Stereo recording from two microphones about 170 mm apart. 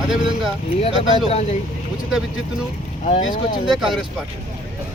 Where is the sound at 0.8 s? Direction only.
35° left (ahead or behind).